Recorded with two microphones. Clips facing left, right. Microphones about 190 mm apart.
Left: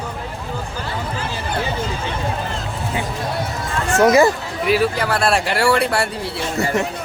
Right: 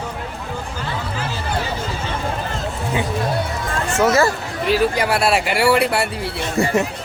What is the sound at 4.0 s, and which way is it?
Speech, 15° left (ahead or behind).